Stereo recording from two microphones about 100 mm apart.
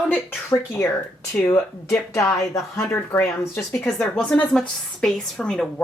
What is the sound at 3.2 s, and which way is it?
A woman's voice, 15° left (ahead or behind).